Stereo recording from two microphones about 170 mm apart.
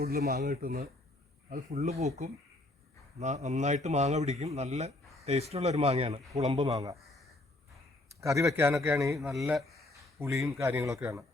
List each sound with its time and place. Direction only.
0.0 s speech: 65° right (ahead or behind)
1.7 s speech: 40° right (ahead or behind)
6.7 s a man's voice: 20° right (ahead or behind)
8.2 s speech: 20° right (ahead or behind)
10.2 s speech: 15° right (ahead or behind)